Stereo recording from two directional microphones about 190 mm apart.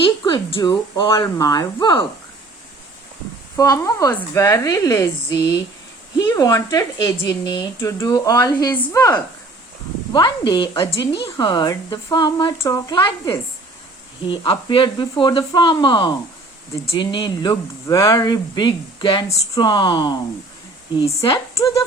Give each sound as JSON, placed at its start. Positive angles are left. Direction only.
{"t": 0.0, "sound": "speech", "side_deg": 25}
{"t": 3.5, "sound": "a woman's voice", "side_deg": 15}
{"t": 21.6, "sound": "speech", "side_deg": 15}